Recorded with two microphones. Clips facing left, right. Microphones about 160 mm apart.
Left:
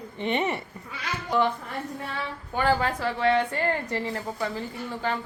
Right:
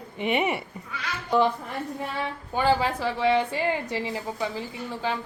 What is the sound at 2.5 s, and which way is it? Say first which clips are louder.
A woman's voice: right 1 dB; 15° right (ahead or behind).